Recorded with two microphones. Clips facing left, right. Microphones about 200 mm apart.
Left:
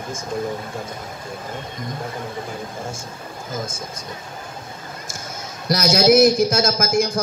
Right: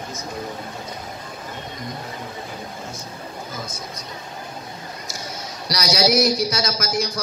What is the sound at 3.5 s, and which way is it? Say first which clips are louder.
Speech: left 4 dB; 50° left (ahead or behind).